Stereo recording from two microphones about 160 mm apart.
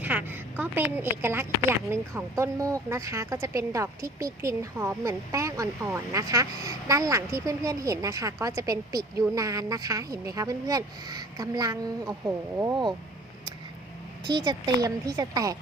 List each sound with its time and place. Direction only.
0.0 s a woman's voice: 10° right (ahead or behind)
14.3 s speech: 25° right (ahead or behind)